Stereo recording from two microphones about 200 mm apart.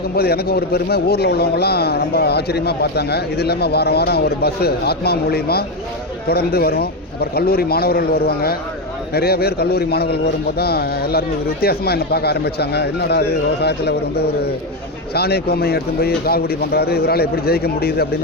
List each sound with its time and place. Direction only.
0.2 s speech: 50° left (ahead or behind)